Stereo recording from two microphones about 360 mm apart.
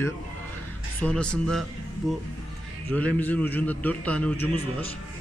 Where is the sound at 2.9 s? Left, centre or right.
Centre.